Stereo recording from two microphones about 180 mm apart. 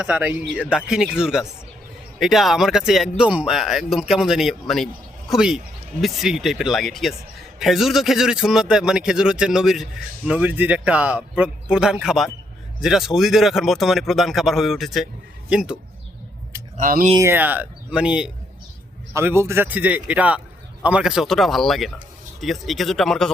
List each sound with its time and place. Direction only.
0.0 s a man's voice: 5° right (ahead or behind)
16.7 s speech: 45° right (ahead or behind)
17.2 s a man's voice: 10° right (ahead or behind)